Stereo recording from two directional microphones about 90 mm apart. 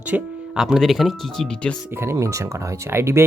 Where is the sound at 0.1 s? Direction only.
10° right (ahead or behind); by 1.7 s 5° left (ahead or behind).